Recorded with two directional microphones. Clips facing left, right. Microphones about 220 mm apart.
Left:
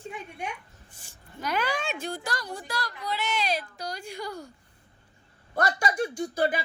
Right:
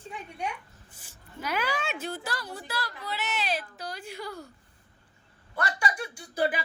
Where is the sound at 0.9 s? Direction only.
5° right (ahead or behind).